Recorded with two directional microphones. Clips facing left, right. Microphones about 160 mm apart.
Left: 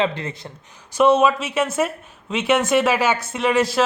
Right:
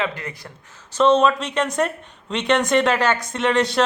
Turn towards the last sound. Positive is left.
turn(degrees=5)  # may be behind; listen again after turning